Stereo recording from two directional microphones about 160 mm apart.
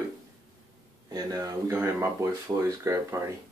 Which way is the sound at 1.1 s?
20° right (ahead or behind).